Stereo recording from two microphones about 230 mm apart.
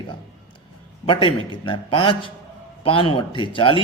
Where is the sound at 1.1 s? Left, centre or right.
Left.